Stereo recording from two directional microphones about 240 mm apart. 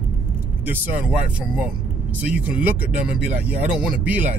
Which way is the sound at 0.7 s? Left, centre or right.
Centre.